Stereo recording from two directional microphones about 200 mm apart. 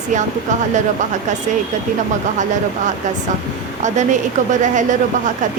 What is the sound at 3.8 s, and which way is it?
A woman's voice, 35° right (ahead or behind).